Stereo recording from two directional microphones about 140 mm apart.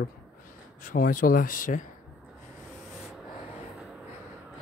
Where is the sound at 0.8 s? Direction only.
80° left.